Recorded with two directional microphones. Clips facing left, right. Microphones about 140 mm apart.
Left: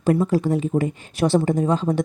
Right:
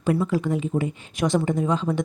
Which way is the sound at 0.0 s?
40° left (ahead or behind).